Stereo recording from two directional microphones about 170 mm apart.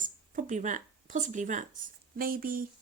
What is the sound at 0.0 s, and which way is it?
Speech, 50° right (ahead or behind).